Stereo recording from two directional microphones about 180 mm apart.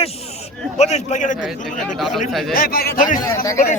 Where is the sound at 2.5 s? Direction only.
55° left (ahead or behind).